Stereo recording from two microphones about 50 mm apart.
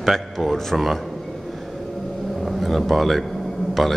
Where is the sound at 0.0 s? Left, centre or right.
Centre.